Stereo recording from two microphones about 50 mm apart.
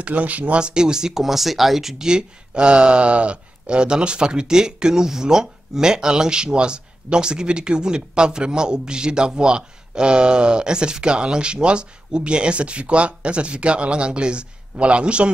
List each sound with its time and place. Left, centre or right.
0.0 s speech: right
0.6 s speech: centre